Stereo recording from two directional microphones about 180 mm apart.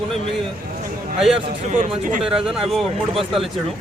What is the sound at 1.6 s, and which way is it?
Speech, 45° right (ahead or behind).